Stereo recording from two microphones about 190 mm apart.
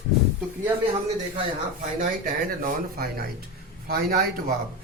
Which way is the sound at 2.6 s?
50° right (ahead or behind).